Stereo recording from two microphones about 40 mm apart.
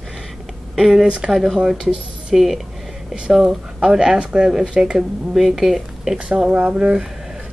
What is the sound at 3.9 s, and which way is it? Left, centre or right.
Speech, centre.